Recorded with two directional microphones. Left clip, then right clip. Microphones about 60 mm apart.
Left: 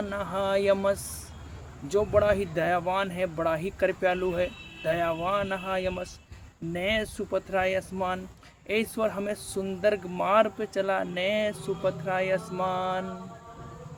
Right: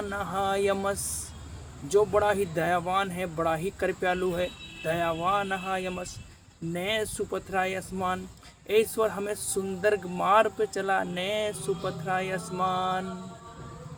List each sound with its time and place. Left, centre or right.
0.1 s speech: left